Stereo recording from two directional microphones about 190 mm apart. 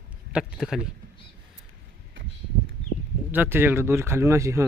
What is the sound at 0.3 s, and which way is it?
Speech, 5° right (ahead or behind).